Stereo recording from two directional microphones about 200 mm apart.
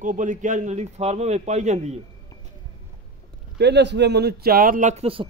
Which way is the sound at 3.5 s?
60° right (ahead or behind).